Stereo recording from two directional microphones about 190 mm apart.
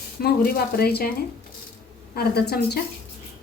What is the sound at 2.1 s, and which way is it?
Speech, 55° left (ahead or behind).